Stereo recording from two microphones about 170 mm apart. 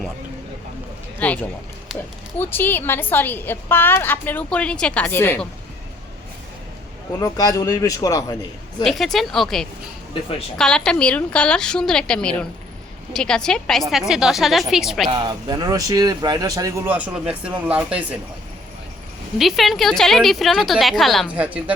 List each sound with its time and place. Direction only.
1.2 s a woman's voice: 10° left (ahead or behind)
7.2 s speech: 20° left (ahead or behind)
8.8 s a woman's voice: centre (ahead or behind)
15.1 s speech: 25° right (ahead or behind); by 18.0 s 5° right (ahead or behind)
19.4 s a woman's voice: centre (ahead or behind)